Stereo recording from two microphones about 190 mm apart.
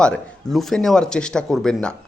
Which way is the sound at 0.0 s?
5° left (ahead or behind).